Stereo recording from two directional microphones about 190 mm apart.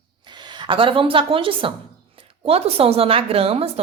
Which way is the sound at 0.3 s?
25° right (ahead or behind).